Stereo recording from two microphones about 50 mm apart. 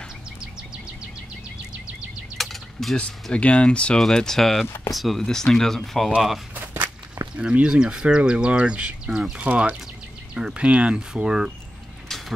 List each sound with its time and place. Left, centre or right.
2.3 s a sound: centre
3.0 s speech: left
4.0 s speech: centre
5.2 s speech: centre
6.5 s walk: right
7.3 s speech: right